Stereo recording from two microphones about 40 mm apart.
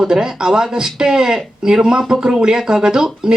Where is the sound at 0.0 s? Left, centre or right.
Centre.